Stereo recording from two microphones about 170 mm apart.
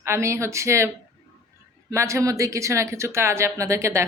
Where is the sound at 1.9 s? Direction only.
15° right (ahead or behind).